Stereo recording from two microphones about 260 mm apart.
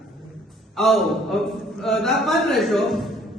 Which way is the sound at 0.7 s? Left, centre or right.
Centre.